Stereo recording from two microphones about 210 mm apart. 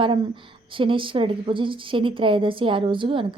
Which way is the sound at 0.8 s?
25° right (ahead or behind).